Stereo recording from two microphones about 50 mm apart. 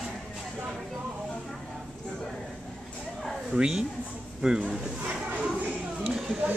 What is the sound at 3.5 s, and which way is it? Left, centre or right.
A woman's voice, centre.